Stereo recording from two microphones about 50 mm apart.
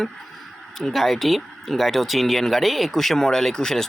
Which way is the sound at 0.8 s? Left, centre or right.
Centre.